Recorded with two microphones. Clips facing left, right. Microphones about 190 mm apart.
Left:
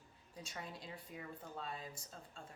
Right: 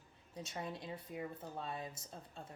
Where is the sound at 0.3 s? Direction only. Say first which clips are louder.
Right 5 dB; 25° right (ahead or behind).